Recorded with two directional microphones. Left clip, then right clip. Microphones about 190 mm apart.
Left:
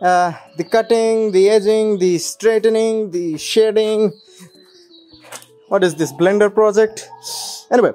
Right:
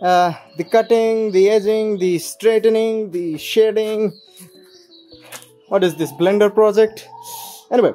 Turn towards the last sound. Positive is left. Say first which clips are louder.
# left 1 dB
turn(degrees=20)  # may be behind; listen again after turning